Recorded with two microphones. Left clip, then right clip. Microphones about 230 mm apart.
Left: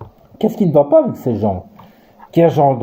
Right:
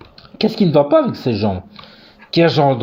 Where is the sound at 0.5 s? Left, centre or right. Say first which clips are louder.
Left 2 dB; right.